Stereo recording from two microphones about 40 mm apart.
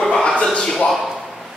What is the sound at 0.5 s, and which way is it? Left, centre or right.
Speech, centre.